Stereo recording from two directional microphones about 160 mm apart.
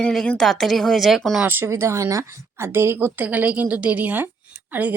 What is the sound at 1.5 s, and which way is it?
Speech, 15° right (ahead or behind).